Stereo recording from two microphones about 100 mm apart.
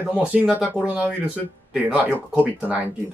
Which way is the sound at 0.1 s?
15° right (ahead or behind).